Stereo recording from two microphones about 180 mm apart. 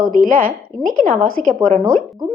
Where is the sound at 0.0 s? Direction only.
50° right (ahead or behind).